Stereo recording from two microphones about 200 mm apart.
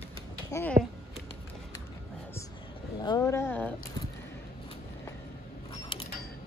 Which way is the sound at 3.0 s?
20° left (ahead or behind).